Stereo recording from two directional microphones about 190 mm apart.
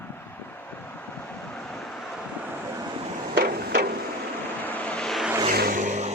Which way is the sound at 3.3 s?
55° right (ahead or behind).